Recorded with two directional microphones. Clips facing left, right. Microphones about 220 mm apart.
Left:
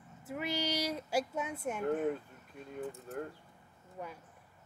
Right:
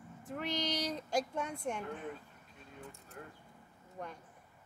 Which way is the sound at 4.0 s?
5° left (ahead or behind).